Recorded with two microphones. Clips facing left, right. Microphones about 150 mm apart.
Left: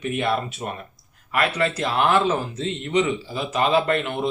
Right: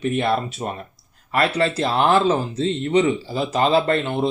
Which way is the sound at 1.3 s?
30° right (ahead or behind).